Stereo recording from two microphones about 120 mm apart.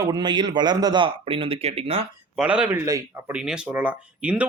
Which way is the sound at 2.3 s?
5° right (ahead or behind).